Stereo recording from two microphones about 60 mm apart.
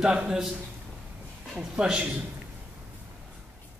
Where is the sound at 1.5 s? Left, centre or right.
Centre.